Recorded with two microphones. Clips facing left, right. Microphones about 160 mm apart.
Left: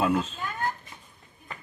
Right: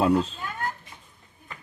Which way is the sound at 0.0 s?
35° right (ahead or behind).